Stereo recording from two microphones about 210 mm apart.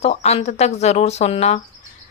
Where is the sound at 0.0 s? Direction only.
30° left (ahead or behind).